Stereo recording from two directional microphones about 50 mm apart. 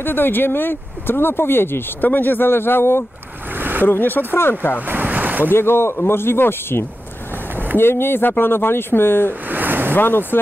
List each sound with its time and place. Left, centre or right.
0.0 s speech: left
3.5 s a sound: right
3.8 s speech: left
4.7 s ocean: right
5.5 s speech: left
9.3 s a sound: right
9.9 s speech: left